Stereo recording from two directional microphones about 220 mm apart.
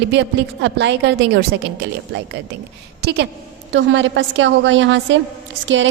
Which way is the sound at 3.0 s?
50° right (ahead or behind).